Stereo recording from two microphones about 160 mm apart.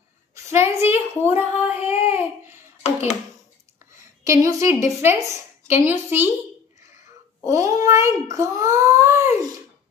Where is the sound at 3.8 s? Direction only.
20° right (ahead or behind).